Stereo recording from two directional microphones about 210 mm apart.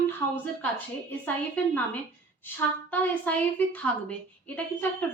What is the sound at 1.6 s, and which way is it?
A woman's voice, 10° left (ahead or behind).